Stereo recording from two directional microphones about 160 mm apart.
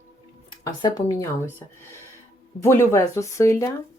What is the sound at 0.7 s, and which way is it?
Speech, 25° left (ahead or behind).